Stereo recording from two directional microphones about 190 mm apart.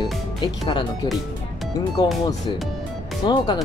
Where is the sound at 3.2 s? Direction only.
25° left (ahead or behind).